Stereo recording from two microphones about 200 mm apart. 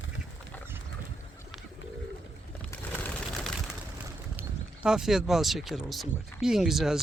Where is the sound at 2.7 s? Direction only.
10° left (ahead or behind).